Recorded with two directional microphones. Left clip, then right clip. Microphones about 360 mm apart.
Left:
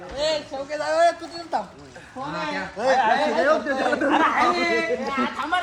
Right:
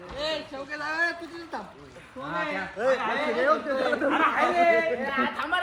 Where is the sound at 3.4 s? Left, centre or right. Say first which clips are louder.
Left 3 dB; left.